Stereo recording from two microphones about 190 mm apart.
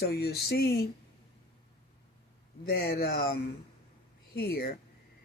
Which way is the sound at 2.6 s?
55° left (ahead or behind).